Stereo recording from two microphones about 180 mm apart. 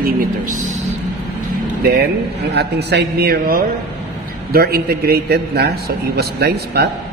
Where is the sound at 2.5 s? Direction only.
65° right (ahead or behind).